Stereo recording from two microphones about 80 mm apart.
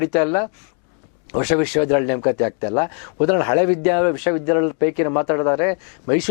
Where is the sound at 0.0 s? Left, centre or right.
Centre.